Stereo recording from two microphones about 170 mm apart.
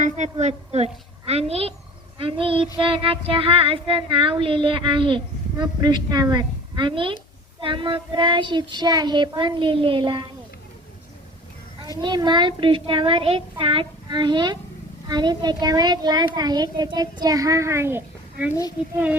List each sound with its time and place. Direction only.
0.0 s a woman's voice: 40° right (ahead or behind)
2.1 s child singing: 30° right (ahead or behind)
7.6 s a child's voice: 30° right (ahead or behind)
12.0 s a child's voice: 25° right (ahead or behind); by 18.5 s 10° right (ahead or behind)